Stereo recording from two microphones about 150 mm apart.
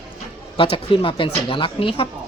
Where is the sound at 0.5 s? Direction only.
35° left (ahead or behind).